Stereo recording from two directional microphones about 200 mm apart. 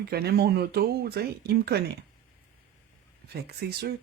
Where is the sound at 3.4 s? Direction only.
50° right (ahead or behind).